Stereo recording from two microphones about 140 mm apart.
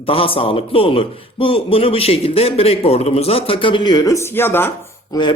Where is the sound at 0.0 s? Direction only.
40° left (ahead or behind); by 4.7 s 15° left (ahead or behind).